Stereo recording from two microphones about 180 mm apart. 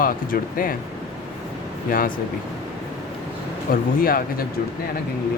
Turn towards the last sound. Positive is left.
turn(degrees=55)  # may be behind; listen again after turning